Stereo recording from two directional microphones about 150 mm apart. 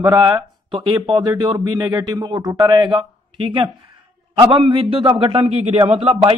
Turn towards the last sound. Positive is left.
turn(degrees=-40)  # may be behind; listen again after turning